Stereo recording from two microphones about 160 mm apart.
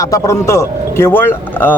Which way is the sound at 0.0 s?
20° left (ahead or behind).